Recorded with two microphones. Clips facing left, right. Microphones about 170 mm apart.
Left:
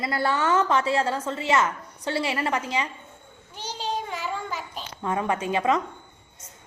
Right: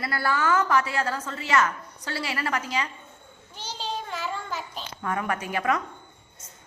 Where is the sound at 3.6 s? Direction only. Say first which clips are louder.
Left 3 dB; 15° left (ahead or behind).